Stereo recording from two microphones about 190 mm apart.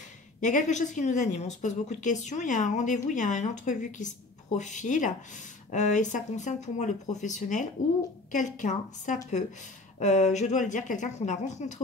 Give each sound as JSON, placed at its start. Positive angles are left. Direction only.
{"t": 0.4, "sound": "a woman's voice", "side_deg": 40}